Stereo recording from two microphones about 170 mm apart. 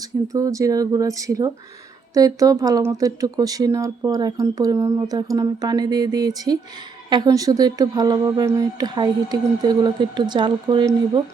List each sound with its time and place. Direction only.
0.0 s speech: 20° right (ahead or behind)